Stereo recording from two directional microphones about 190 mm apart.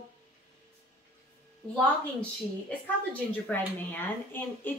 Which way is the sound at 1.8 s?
5° left (ahead or behind).